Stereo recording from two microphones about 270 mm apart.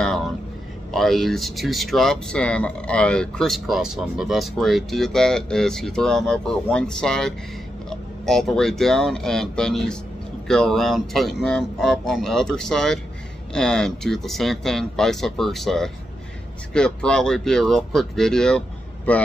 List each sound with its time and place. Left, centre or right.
0.9 s speech: centre